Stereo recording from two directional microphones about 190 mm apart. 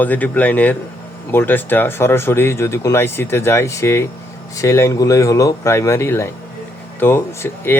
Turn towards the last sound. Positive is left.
turn(degrees=15)  # may be behind; listen again after turning